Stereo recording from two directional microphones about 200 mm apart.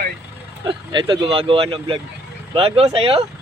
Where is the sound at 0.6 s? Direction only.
25° right (ahead or behind).